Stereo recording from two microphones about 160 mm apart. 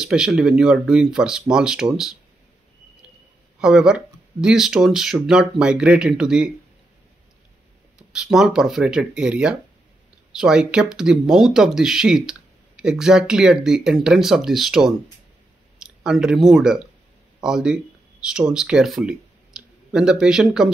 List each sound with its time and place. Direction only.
0.0 s speech: 5° right (ahead or behind)
3.5 s speech: 5° right (ahead or behind)
8.1 s speech: 5° right (ahead or behind)
16.0 s speech: 5° right (ahead or behind)